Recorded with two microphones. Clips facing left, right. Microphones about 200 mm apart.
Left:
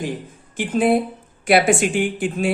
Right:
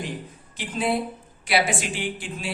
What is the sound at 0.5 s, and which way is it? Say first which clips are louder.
Speech: left 8 dB; 50° left (ahead or behind).